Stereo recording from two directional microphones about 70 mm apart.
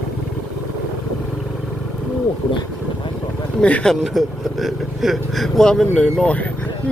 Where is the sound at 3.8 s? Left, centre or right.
Centre.